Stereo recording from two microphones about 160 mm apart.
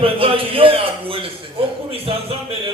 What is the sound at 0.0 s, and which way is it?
A man's voice, 35° right (ahead or behind).